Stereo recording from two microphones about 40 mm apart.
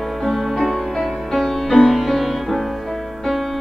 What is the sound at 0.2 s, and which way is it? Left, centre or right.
Music, centre.